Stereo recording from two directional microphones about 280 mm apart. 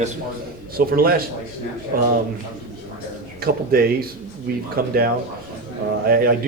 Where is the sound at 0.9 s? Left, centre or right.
Right.